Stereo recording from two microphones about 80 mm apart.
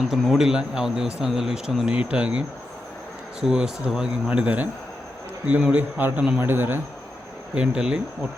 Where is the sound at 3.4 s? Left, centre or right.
Centre; by 6.7 s right.